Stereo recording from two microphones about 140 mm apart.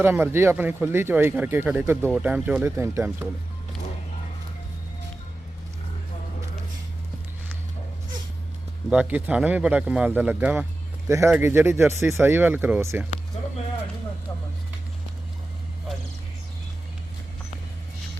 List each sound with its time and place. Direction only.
0.0 s speech: 15° right (ahead or behind)
8.9 s speech: 10° right (ahead or behind)